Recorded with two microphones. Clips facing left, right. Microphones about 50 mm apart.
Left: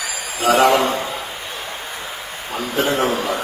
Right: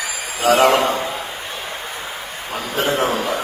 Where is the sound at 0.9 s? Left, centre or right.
Right.